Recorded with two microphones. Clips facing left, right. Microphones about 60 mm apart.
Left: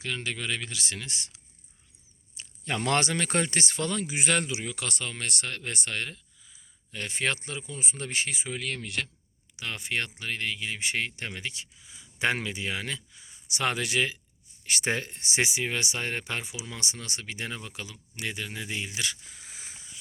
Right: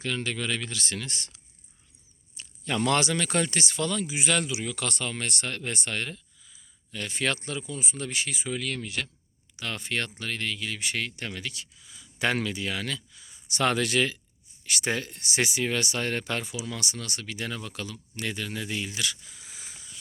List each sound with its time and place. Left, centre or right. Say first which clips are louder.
0.0 s speech: right 2 dB; centre
2.6 s speech: right 2 dB; left
4.6 s speech: right 3 dB; centre
6.4 s a sound: right 1 dB; left
7.7 s speech: right 1 dB; left
9.6 s speech: right 1 dB; centre
13.3 s speech: right 4 dB; centre
14.6 s speech: even; left
19.0 s a sound: right 2 dB; left